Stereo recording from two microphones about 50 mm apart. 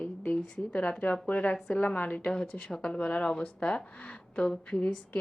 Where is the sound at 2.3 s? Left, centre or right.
Centre.